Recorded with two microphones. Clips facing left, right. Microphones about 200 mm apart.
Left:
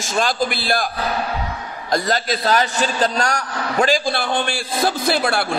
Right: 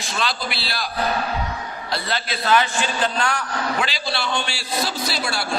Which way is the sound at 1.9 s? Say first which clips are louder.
Left 7 dB; 40° left (ahead or behind).